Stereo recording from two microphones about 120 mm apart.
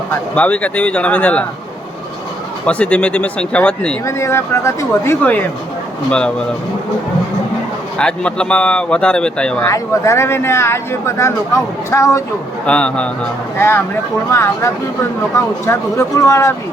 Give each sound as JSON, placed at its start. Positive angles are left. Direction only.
{"t": 0.3, "sound": "speech", "side_deg": 10}
{"t": 2.6, "sound": "speech", "side_deg": 10}
{"t": 4.0, "sound": "speech", "side_deg": 25}
{"t": 6.1, "sound": "speech", "side_deg": 10}
{"t": 7.9, "sound": "speech", "side_deg": 5}
{"t": 9.6, "sound": "speech", "side_deg": 25}
{"t": 12.6, "sound": "speech", "side_deg": 10}
{"t": 13.6, "sound": "speech", "side_deg": 20}